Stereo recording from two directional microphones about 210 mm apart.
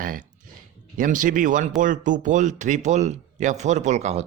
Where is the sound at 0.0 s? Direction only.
40° right (ahead or behind).